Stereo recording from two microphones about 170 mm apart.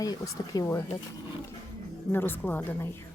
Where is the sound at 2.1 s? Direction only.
10° left (ahead or behind).